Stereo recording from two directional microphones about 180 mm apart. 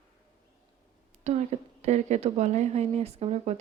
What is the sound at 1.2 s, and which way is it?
Speech, 40° right (ahead or behind).